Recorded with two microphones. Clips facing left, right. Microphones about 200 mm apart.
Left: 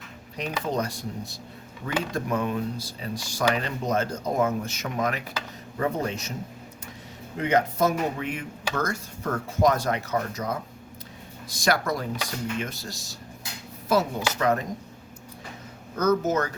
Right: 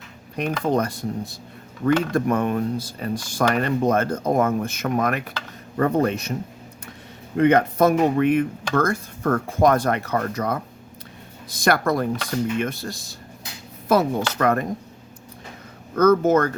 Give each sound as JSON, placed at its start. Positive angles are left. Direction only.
{"t": 0.3, "sound": "speech", "side_deg": -55}
{"t": 7.3, "sound": "speech", "side_deg": -60}
{"t": 16.0, "sound": "speech", "side_deg": -55}